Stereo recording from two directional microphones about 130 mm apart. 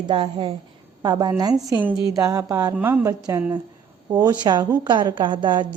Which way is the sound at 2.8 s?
15° right (ahead or behind).